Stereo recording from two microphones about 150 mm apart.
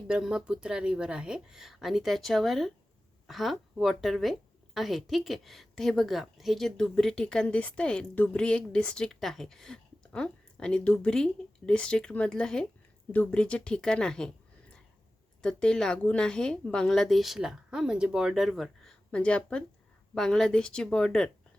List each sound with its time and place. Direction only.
0.1 s speech: 5° right (ahead or behind)
15.4 s speech: 5° left (ahead or behind)